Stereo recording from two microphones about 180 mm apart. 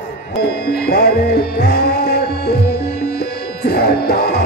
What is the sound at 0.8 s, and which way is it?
Music, 60° left (ahead or behind).